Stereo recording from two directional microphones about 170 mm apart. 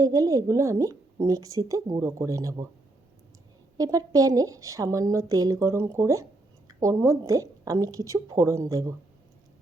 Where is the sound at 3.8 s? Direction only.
20° right (ahead or behind).